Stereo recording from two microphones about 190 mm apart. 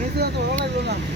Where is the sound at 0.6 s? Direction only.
65° right (ahead or behind).